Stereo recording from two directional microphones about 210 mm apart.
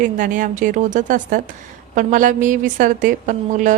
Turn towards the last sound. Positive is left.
turn(degrees=-40)  # may be behind; listen again after turning